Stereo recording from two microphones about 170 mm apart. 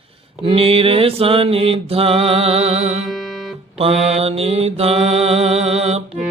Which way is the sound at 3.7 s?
35° right (ahead or behind).